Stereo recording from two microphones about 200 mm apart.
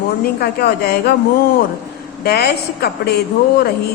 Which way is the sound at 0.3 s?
55° left (ahead or behind).